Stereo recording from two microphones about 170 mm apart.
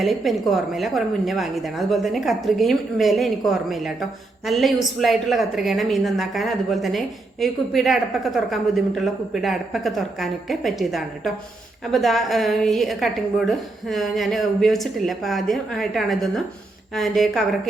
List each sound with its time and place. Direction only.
0.0 s a woman's voice: centre (ahead or behind)